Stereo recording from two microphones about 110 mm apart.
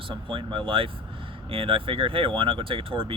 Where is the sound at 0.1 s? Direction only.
55° right (ahead or behind).